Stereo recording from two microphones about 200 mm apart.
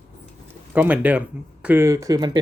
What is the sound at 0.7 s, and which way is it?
Speech, 10° right (ahead or behind).